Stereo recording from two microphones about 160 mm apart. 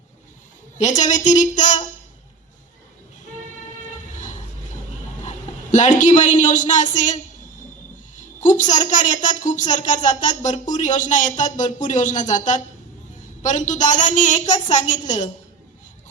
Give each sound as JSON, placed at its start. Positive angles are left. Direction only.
{"t": 0.8, "sound": "a woman's voice", "side_deg": 50}
{"t": 4.1, "sound": "vehicle", "side_deg": 50}
{"t": 5.7, "sound": "a woman's voice", "side_deg": 50}
{"t": 8.4, "sound": "a woman's voice", "side_deg": 50}